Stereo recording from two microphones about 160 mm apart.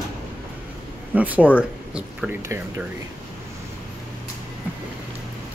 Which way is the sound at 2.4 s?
20° right (ahead or behind).